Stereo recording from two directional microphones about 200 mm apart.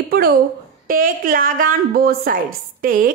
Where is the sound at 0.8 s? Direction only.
45° right (ahead or behind).